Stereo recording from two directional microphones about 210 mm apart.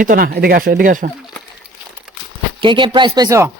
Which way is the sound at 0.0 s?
40° right (ahead or behind).